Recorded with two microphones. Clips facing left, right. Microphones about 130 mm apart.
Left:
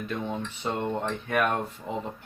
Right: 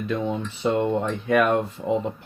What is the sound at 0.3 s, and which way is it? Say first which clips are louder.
Speech: right 7 dB; 90° right.